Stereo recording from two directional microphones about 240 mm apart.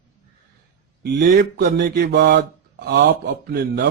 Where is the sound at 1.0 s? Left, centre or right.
Right.